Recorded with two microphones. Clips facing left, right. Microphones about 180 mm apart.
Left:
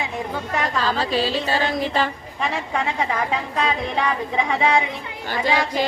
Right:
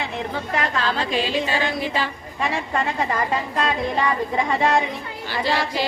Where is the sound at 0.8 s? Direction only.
40° left (ahead or behind).